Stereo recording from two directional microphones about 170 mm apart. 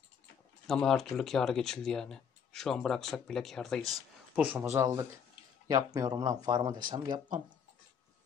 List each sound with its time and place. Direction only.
0.7 s speech: centre (ahead or behind)
3.9 s speech: 10° right (ahead or behind); by 7.4 s 25° right (ahead or behind)